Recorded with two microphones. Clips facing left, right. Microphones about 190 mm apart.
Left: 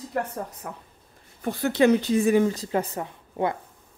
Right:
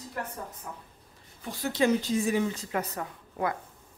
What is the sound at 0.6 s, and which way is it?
Speech, 80° left.